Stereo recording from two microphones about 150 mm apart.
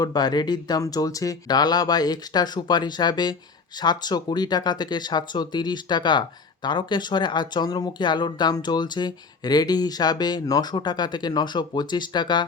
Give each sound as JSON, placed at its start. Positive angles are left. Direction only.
{"t": 0.0, "sound": "speech", "side_deg": 30}